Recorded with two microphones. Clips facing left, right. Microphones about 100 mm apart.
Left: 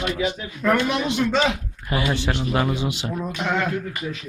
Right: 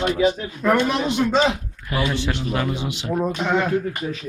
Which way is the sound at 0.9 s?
30° right (ahead or behind).